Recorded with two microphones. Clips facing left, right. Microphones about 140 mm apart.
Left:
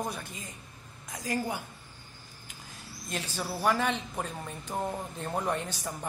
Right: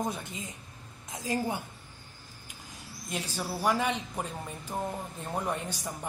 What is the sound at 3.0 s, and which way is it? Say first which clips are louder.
A woman's voice: even; 10° right (ahead or behind).